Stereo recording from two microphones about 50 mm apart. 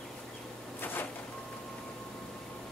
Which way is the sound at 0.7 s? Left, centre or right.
Left.